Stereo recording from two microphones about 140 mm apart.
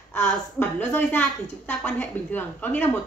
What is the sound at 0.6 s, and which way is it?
A woman's voice, 15° left (ahead or behind).